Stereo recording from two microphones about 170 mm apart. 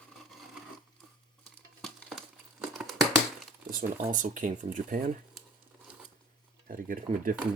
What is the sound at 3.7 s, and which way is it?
Speech, 50° right (ahead or behind).